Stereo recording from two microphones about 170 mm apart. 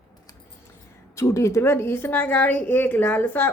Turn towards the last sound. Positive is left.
turn(degrees=10)  # may be behind; listen again after turning